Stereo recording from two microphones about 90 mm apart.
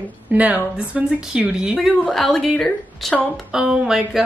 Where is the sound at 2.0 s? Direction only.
5° left (ahead or behind).